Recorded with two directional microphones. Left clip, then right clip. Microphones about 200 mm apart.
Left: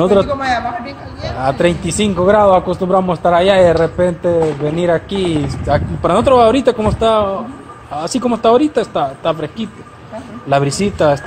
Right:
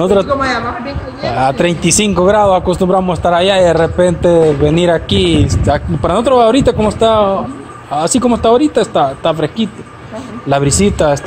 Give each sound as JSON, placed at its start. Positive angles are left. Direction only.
{"t": 0.0, "sound": "a man's voice", "side_deg": -25}
{"t": 1.3, "sound": "a man's voice", "side_deg": -25}
{"t": 6.0, "sound": "speech", "side_deg": -15}